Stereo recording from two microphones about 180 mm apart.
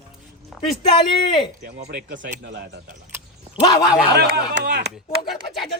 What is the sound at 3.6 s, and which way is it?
Speech, 30° left (ahead or behind).